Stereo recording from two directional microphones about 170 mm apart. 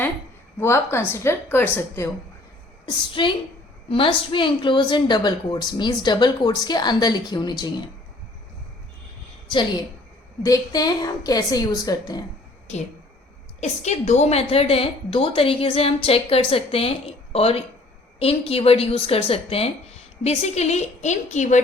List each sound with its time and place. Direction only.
0.6 s a woman's voice: 15° left (ahead or behind)
2.8 s a woman's voice: 30° left (ahead or behind)
10.4 s a woman's voice: 20° left (ahead or behind)
13.6 s a woman's voice: 40° left (ahead or behind)